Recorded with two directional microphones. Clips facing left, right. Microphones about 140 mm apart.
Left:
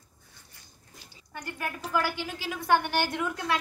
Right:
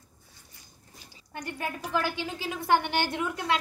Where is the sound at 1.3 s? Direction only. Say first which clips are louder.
Right 1 dB; 25° right (ahead or behind).